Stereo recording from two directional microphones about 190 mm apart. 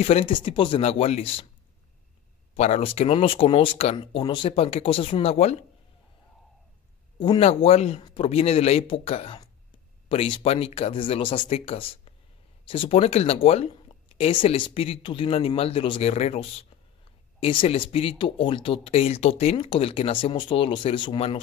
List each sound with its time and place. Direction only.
0.0 s speech: 30° left (ahead or behind)
2.5 s speech: 35° left (ahead or behind)
7.2 s speech: 30° left (ahead or behind)